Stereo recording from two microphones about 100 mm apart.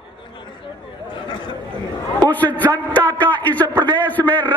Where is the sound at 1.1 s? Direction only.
50° left (ahead or behind).